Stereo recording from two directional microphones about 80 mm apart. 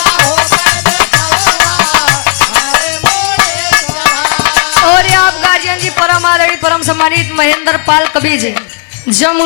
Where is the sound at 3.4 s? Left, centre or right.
Left.